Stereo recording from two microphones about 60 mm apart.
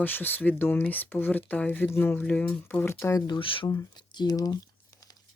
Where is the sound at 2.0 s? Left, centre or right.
Left.